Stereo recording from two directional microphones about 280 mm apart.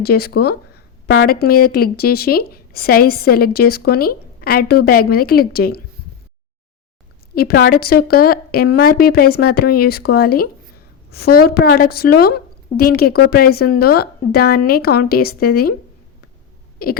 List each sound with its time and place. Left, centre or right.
0.0 s speech: left
7.3 s speech: left
16.7 s a sound: left